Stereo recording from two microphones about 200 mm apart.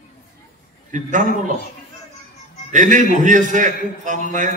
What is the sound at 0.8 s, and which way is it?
Speech, 40° right (ahead or behind).